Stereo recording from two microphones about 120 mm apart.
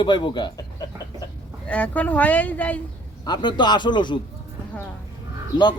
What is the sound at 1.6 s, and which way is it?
Speech, 10° left (ahead or behind).